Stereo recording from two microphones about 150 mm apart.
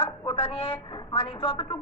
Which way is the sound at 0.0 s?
40° left (ahead or behind).